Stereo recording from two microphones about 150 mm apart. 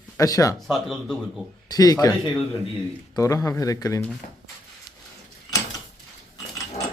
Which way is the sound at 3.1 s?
20° left (ahead or behind).